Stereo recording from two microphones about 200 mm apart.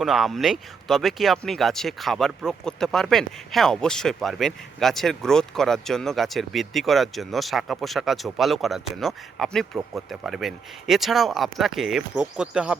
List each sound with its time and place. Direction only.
0.0 s speech: centre (ahead or behind)